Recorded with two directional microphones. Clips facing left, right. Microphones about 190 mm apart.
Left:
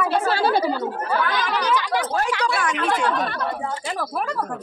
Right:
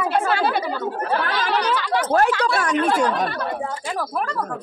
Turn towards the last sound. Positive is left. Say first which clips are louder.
# right 3 dB
turn(degrees=-40)  # may be behind; listen again after turning